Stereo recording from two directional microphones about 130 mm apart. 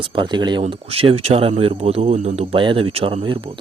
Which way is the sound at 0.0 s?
40° right (ahead or behind).